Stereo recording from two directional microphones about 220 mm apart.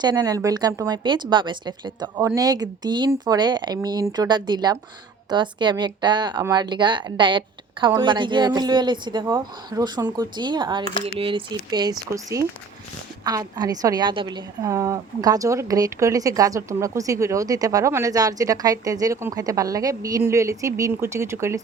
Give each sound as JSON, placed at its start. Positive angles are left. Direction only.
{"t": 0.0, "sound": "a woman's voice", "side_deg": -20}